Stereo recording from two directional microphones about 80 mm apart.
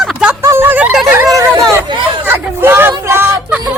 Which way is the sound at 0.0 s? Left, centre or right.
Centre.